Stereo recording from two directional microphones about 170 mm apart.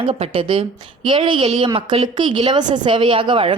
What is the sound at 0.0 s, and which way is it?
A woman's voice, 35° right (ahead or behind).